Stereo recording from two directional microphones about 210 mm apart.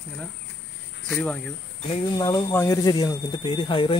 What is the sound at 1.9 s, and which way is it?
Speech, 20° left (ahead or behind).